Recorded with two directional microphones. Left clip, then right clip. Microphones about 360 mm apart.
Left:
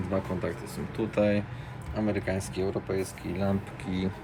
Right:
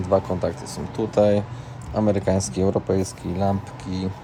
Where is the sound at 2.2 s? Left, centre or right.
Right.